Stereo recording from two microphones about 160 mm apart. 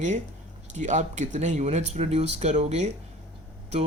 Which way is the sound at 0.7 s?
50° right (ahead or behind).